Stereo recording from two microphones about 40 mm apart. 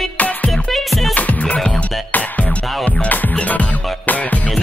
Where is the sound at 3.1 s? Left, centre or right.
Left.